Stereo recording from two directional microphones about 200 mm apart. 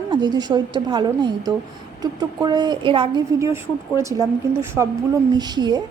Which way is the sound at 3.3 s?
15° right (ahead or behind).